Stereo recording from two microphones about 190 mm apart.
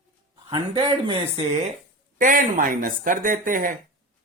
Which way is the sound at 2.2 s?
45° right (ahead or behind).